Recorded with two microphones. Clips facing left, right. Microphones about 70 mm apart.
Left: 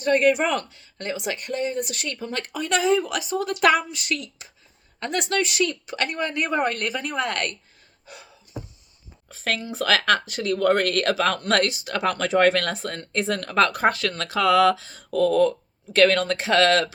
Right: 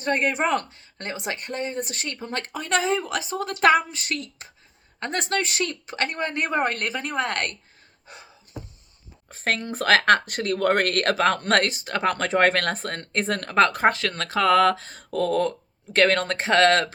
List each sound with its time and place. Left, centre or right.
0.0 s speech: right
8.0 s a sound: right
9.3 s speech: right